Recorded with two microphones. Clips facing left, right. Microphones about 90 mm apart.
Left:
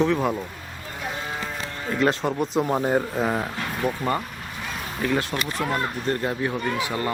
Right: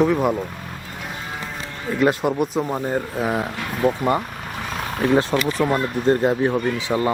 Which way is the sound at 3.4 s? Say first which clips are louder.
Right 4 dB; 20° right (ahead or behind).